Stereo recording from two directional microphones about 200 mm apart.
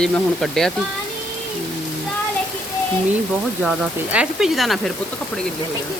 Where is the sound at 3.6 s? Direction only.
5° right (ahead or behind).